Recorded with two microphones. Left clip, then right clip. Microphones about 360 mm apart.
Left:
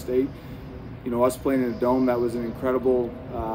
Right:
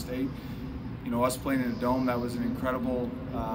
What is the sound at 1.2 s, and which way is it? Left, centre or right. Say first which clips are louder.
A man's voice: left 6 dB; centre.